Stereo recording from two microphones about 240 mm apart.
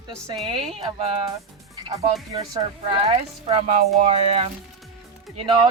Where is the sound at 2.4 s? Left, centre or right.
Right.